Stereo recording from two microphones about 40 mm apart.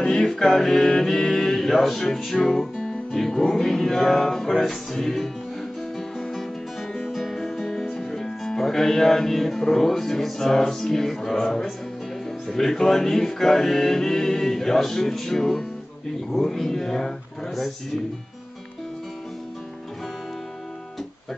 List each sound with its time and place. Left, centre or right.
0.0 s music: centre
6.9 s music: centre
8.1 s music: centre